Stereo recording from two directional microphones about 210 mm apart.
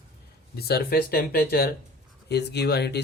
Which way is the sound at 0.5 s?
50° left (ahead or behind).